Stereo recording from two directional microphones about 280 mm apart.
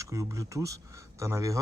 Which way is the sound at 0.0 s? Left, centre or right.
Centre.